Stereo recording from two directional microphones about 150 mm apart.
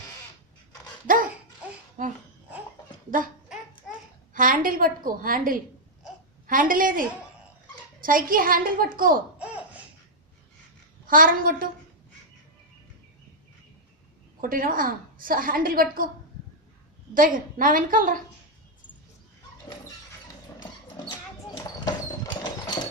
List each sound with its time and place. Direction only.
1.0 s dog: 65° right (ahead or behind)
2.0 s babbling: 60° right (ahead or behind)
4.4 s a woman's voice: 65° right (ahead or behind)
8.0 s a woman's voice: 70° right (ahead or behind)
9.4 s laughter: 10° right (ahead or behind)
11.0 s a woman's voice: 70° right (ahead or behind)
14.4 s a woman's voice: 70° right (ahead or behind)
17.2 s a woman's voice: 65° right (ahead or behind)
21.6 s a sound: 25° left (ahead or behind)